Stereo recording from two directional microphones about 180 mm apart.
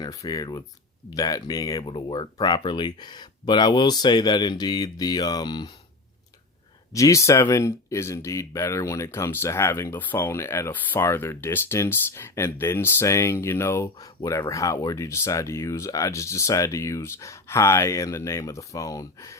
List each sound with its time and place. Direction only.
0.0 s speech: 20° left (ahead or behind)
6.9 s speech: 15° left (ahead or behind)